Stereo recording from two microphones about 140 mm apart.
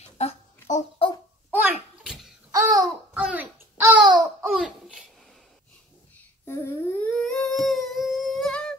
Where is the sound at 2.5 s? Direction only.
25° right (ahead or behind).